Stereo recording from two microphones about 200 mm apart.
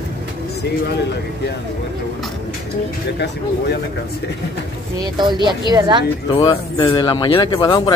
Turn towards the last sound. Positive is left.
turn(degrees=20)  # may be behind; listen again after turning